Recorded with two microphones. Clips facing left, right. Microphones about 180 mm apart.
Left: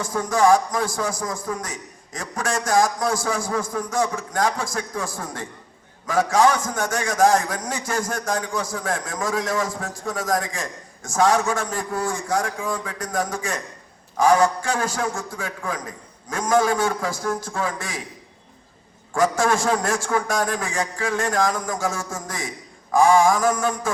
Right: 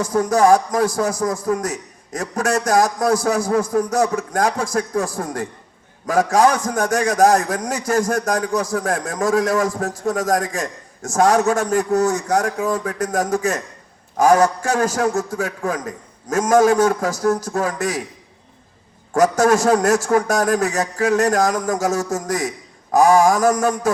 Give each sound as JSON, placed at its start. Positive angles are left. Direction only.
{"t": 0.0, "sound": "a man's voice", "side_deg": -45}
{"t": 19.1, "sound": "a man's voice", "side_deg": -45}